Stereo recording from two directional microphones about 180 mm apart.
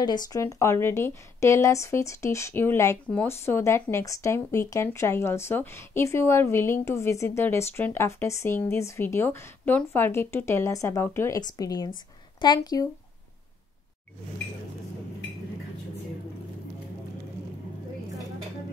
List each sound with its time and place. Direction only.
0.0 s speech: 20° left (ahead or behind)